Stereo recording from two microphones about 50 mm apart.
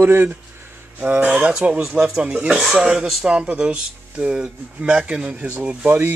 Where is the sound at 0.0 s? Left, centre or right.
Right.